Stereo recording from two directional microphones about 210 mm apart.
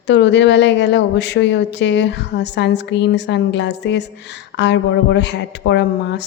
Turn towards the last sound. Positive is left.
turn(degrees=55)  # may be behind; listen again after turning